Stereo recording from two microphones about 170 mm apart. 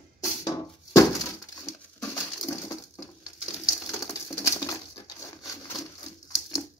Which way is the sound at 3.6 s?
20° left (ahead or behind).